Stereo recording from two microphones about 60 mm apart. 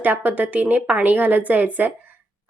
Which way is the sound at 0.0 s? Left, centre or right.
Right.